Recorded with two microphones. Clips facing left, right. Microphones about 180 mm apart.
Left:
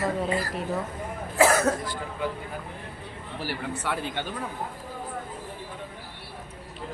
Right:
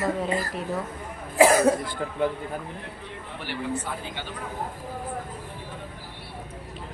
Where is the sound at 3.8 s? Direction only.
65° left (ahead or behind).